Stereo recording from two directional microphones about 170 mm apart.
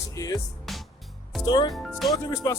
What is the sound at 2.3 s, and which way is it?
Speech, 20° left (ahead or behind).